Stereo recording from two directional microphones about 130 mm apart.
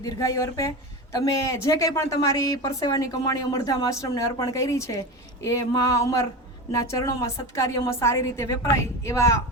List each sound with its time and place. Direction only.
0.0 s speech: 25° left (ahead or behind)